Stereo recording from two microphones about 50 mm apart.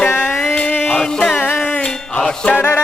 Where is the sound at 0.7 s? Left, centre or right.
Left.